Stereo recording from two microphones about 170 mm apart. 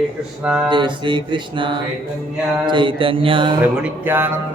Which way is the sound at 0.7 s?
25° right (ahead or behind).